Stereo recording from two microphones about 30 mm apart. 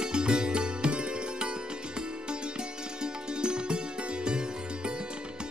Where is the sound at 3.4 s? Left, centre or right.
Right.